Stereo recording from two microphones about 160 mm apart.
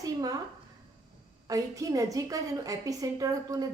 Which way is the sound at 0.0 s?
25° right (ahead or behind).